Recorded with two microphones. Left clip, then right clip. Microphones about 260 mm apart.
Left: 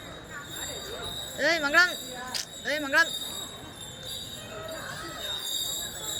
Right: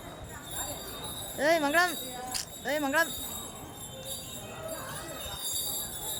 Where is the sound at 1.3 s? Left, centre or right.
Centre.